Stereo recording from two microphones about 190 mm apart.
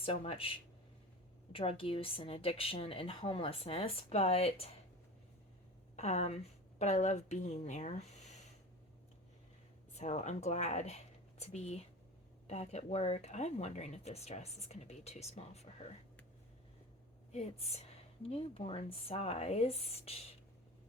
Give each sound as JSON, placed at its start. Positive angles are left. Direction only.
{"t": 0.0, "sound": "speech", "side_deg": 30}
{"t": 1.5, "sound": "speech", "side_deg": 30}
{"t": 6.0, "sound": "a woman's voice", "side_deg": 35}
{"t": 9.9, "sound": "speech", "side_deg": 35}
{"t": 17.3, "sound": "speech", "side_deg": 35}